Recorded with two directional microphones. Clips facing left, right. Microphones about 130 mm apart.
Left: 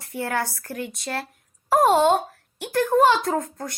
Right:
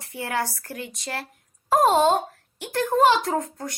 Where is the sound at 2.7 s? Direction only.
20° right (ahead or behind).